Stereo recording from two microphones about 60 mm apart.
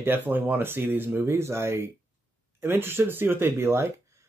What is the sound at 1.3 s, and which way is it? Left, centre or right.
Speech, right.